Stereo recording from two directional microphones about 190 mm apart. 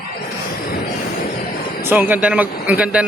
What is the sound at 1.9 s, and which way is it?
A man's voice, 10° right (ahead or behind).